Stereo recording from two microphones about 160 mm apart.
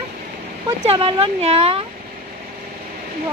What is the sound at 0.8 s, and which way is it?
Speech, 35° right (ahead or behind).